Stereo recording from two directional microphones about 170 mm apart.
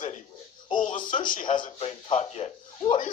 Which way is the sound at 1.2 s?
50° left (ahead or behind).